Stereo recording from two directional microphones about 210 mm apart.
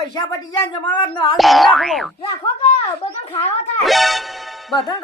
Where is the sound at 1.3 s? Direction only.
Centre (ahead or behind).